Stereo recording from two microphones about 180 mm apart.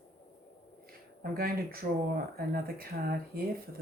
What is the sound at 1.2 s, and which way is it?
Speech, 55° right (ahead or behind).